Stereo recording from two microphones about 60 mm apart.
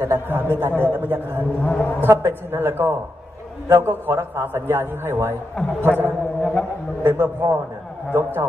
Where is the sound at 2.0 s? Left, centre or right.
Right.